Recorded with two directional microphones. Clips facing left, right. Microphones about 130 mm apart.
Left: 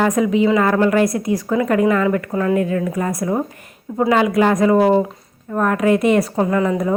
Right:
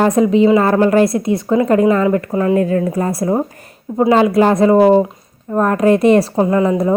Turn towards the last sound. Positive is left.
turn(degrees=-25)  # may be behind; listen again after turning